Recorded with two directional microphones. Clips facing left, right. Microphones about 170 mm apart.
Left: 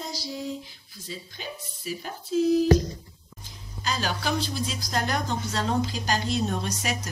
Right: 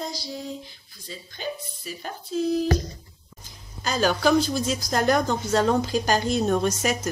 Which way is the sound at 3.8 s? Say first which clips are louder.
Right 7 dB; 45° right (ahead or behind).